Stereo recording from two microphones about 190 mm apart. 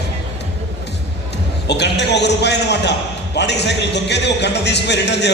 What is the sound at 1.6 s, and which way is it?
A man's voice, 65° left (ahead or behind).